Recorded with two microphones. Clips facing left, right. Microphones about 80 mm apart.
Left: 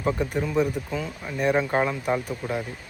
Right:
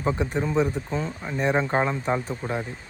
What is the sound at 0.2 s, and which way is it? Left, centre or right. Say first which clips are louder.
Speech: even; right.